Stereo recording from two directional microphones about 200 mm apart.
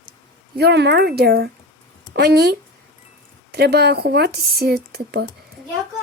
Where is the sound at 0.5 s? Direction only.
55° right (ahead or behind).